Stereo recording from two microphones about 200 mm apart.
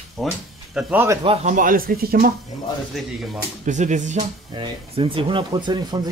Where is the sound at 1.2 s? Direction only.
35° right (ahead or behind).